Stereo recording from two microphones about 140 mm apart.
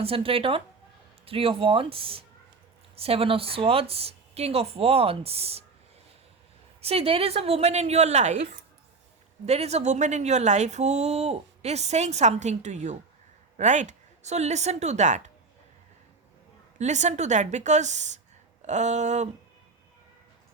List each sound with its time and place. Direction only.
0.0 s a woman's voice: 45° right (ahead or behind)
6.8 s a woman's voice: 45° right (ahead or behind)
9.5 s speech: 50° right (ahead or behind)
16.7 s speech: 55° right (ahead or behind)